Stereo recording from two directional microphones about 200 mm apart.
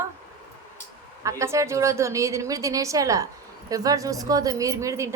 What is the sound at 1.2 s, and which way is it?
A woman's voice, 15° right (ahead or behind).